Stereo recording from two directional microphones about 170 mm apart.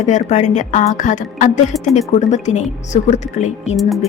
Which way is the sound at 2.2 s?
45° left (ahead or behind).